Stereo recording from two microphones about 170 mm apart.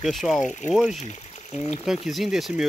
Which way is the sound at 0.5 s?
45° left (ahead or behind).